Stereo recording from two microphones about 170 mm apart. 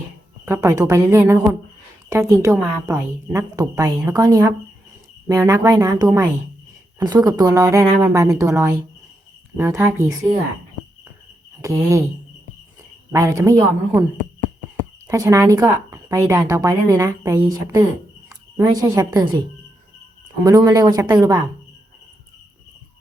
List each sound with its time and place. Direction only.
0.4 s a woman's voice: 15° right (ahead or behind)
11.6 s a woman's voice: 20° right (ahead or behind)
13.1 s a woman's voice: 20° right (ahead or behind)
15.0 s a woman's voice: 20° right (ahead or behind)
20.4 s a woman's voice: 20° right (ahead or behind)